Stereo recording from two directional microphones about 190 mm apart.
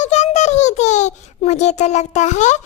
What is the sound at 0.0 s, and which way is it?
A child's voice, 35° left (ahead or behind).